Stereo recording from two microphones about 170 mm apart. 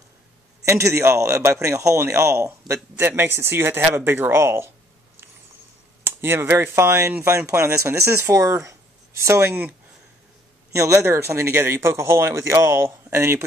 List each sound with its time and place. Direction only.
0.7 s a man's voice: 15° right (ahead or behind)
6.0 s a man's voice: 15° right (ahead or behind)